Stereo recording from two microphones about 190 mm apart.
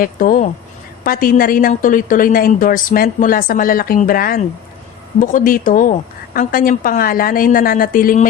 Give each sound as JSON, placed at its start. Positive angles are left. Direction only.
{"t": 0.0, "sound": "a woman's voice", "side_deg": 45}